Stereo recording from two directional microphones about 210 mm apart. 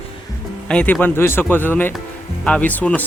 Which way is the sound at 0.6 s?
5° left (ahead or behind).